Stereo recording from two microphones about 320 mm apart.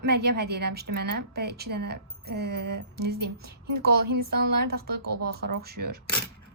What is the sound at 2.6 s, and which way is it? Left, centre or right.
Music, right.